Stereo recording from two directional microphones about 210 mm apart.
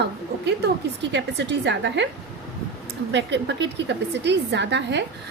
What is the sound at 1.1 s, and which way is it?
Speech, 55° right (ahead or behind).